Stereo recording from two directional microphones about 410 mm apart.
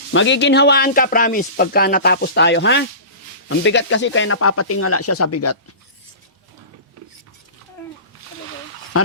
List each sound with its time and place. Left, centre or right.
0.1 s speech: left